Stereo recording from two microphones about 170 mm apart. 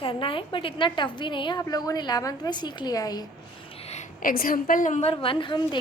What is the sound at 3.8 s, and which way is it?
A woman's voice, 40° left (ahead or behind).